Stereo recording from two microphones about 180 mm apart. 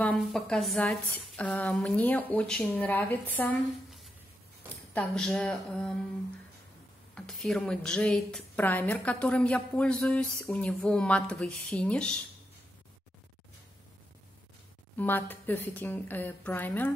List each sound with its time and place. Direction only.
0.0 s speech: 5° left (ahead or behind)
4.9 s a woman's voice: 5° left (ahead or behind)
7.2 s a woman's voice: 5° left (ahead or behind)
15.0 s speech: 10° left (ahead or behind)